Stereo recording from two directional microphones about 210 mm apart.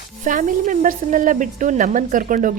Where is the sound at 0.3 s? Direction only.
40° right (ahead or behind).